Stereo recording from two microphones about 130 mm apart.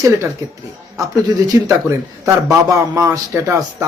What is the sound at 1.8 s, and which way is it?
A man's voice, 25° right (ahead or behind).